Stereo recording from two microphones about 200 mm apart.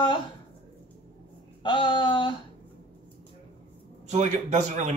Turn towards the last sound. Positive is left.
turn(degrees=-35)  # may be behind; listen again after turning